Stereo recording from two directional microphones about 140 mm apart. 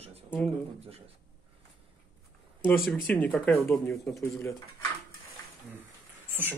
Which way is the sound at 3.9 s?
20° left (ahead or behind).